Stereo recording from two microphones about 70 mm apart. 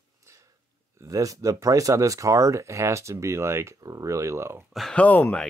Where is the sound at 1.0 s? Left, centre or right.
Right.